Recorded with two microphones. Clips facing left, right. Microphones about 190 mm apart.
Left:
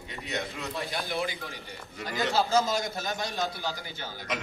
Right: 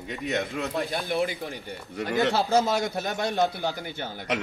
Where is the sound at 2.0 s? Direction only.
65° right (ahead or behind).